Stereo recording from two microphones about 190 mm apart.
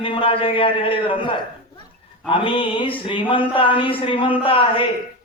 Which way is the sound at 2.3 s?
25° left (ahead or behind).